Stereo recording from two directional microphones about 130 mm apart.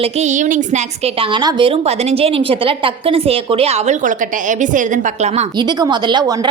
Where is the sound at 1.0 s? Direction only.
40° right (ahead or behind); by 5.5 s 65° right (ahead or behind).